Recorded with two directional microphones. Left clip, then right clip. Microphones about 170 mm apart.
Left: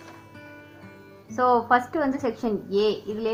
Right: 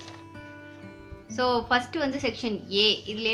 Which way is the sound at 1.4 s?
25° left (ahead or behind).